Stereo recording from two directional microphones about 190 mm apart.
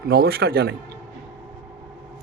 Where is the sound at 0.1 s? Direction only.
55° right (ahead or behind).